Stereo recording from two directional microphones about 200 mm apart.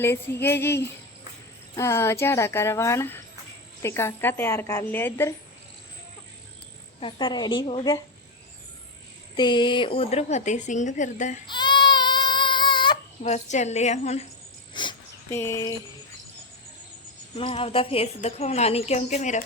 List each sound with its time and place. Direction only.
0.0 s speech: 10° left (ahead or behind)
7.0 s a woman's voice: 25° left (ahead or behind)
9.3 s a woman's voice: 20° left (ahead or behind); by 11.4 s 40° left (ahead or behind)
11.4 s baby cry: 20° left (ahead or behind)
13.2 s a woman's voice: 35° left (ahead or behind)
14.7 s dog: 25° left (ahead or behind)
15.3 s speech: 15° left (ahead or behind)
17.3 s a woman's voice: 25° left (ahead or behind)